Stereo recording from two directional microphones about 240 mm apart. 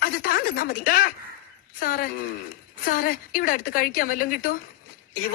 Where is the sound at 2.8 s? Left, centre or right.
Left.